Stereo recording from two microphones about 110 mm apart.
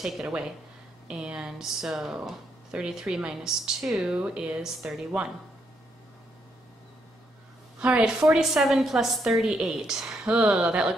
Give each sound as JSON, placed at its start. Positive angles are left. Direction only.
{"t": 0.0, "sound": "a woman's voice", "side_deg": -5}
{"t": 7.8, "sound": "a woman's voice", "side_deg": -10}